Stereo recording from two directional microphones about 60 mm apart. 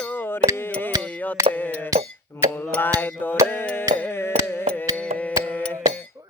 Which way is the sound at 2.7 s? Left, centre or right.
Left.